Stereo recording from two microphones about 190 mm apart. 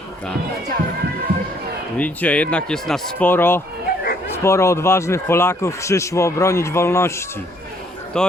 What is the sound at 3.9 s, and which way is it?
Dog, 55° left (ahead or behind).